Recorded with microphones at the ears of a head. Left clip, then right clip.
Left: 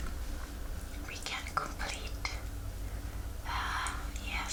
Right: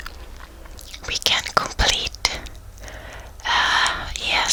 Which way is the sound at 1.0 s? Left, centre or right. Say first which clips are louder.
Right 19 dB; right.